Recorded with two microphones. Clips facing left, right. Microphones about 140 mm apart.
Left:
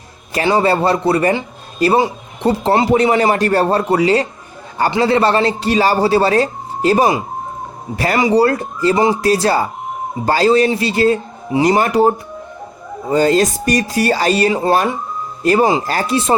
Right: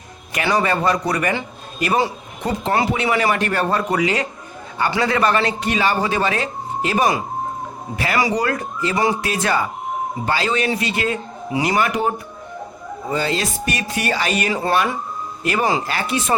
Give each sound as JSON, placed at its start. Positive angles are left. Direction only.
{"t": 0.4, "sound": "a man's voice", "side_deg": 30}